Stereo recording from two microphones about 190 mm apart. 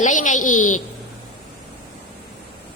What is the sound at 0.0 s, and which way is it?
Speech, 40° left (ahead or behind).